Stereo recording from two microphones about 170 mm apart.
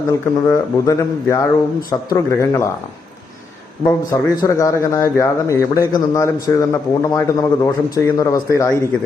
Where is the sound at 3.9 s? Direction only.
20° left (ahead or behind).